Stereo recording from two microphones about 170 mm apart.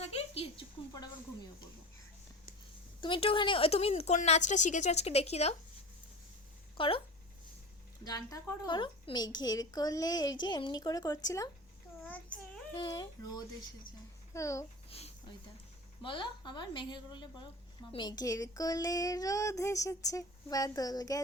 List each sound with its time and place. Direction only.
0.0 s a sound: 35° left (ahead or behind)
3.0 s a woman's voice: 30° left (ahead or behind)
6.7 s speech: 30° left (ahead or behind)
8.0 s a woman's voice: 20° left (ahead or behind)
12.0 s child singing: 10° left (ahead or behind)
12.7 s a woman's voice: 25° left (ahead or behind)
14.8 s a sound: 35° left (ahead or behind)
16.0 s a woman's voice: 30° left (ahead or behind)